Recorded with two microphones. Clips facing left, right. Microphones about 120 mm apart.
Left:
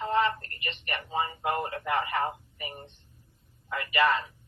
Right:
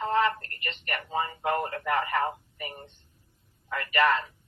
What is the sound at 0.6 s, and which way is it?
A man's voice, 25° left (ahead or behind).